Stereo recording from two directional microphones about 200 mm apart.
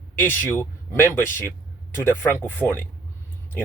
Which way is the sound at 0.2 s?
10° left (ahead or behind).